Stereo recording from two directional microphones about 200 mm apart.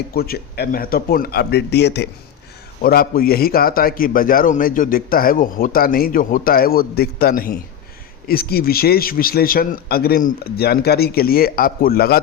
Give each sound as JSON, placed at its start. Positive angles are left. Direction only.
{"t": 0.1, "sound": "a man's voice", "side_deg": 50}